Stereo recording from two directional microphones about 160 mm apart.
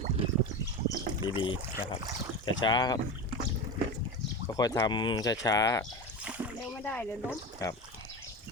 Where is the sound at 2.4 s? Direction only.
30° left (ahead or behind).